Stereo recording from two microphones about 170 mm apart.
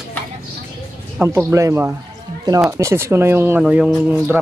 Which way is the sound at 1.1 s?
15° right (ahead or behind).